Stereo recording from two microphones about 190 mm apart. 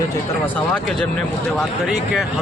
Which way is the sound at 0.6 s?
5° left (ahead or behind).